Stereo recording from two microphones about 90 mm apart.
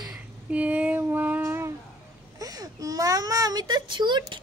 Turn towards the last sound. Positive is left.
turn(degrees=-55)  # may be behind; listen again after turning